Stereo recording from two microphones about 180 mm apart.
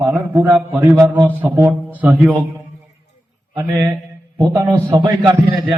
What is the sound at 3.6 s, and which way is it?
A man's voice, 20° right (ahead or behind).